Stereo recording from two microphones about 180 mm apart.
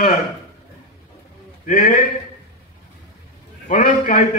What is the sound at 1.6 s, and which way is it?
Speech, 50° left (ahead or behind).